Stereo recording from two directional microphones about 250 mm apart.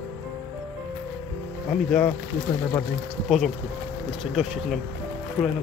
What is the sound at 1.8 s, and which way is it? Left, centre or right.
Speech, centre.